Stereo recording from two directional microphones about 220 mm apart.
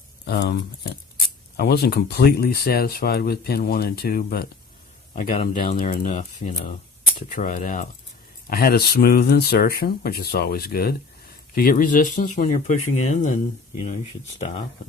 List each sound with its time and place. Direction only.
0.3 s speech: 45° left (ahead or behind); by 14.6 s 30° left (ahead or behind)